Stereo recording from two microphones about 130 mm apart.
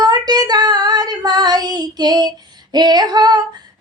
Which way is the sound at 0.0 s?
30° right (ahead or behind).